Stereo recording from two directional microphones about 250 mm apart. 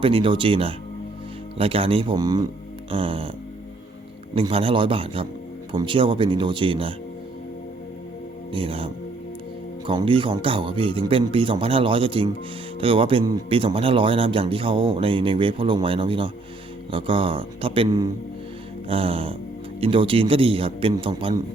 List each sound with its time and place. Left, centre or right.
0.0 s speech: right
4.4 s speech: right
8.5 s speech: right